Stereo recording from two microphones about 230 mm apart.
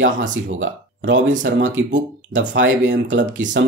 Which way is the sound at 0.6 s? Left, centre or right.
Right.